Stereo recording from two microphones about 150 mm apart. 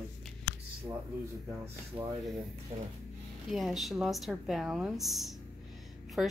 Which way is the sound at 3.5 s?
Centre (ahead or behind).